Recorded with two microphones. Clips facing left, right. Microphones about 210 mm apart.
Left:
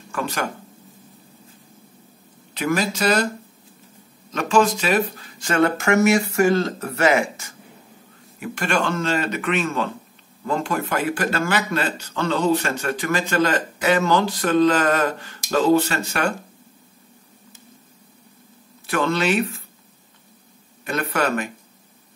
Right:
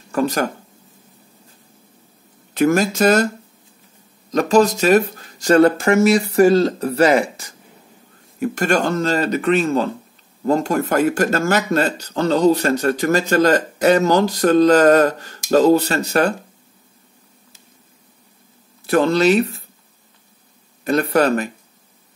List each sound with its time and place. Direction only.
0.1 s speech: 40° right (ahead or behind)
2.5 s a man's voice: 45° right (ahead or behind)
4.3 s speech: 40° right (ahead or behind)
18.9 s speech: 35° right (ahead or behind)
20.8 s speech: 35° right (ahead or behind)